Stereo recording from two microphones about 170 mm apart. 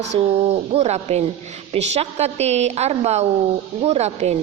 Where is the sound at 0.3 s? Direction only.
40° right (ahead or behind).